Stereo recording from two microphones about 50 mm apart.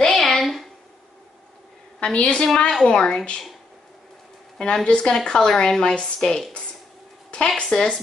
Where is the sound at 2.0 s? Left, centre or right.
Left.